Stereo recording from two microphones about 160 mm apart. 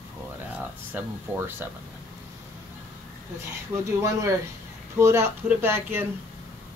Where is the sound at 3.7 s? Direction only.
15° right (ahead or behind).